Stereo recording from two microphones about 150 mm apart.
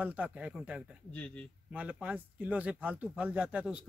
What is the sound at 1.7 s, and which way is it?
Speech, 10° right (ahead or behind).